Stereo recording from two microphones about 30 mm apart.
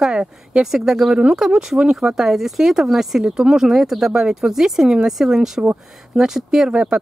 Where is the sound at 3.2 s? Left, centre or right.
Right.